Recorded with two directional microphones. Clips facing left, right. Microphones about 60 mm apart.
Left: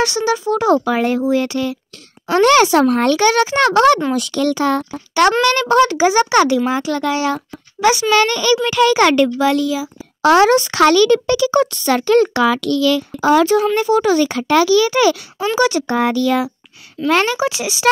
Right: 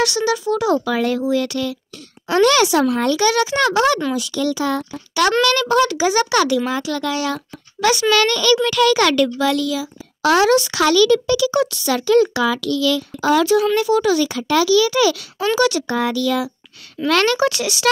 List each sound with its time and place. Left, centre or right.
0.0 s a child's voice: left
4.9 s a child's voice: left
17.1 s a child's voice: centre